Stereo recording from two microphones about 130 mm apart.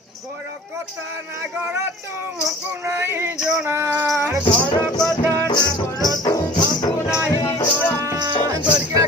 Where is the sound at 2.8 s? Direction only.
20° right (ahead or behind).